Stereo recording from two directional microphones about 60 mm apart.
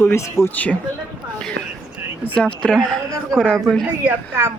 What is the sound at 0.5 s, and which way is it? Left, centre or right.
Speech, left.